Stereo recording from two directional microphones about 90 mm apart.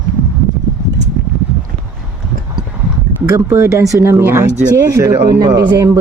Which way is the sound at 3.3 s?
35° right (ahead or behind).